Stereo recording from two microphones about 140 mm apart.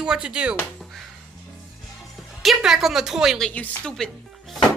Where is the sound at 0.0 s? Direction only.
5° right (ahead or behind).